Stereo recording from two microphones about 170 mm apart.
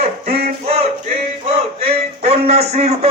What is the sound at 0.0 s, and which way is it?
Music, 35° right (ahead or behind).